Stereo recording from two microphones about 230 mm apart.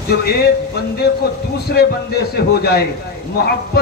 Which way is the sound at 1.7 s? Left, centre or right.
Left.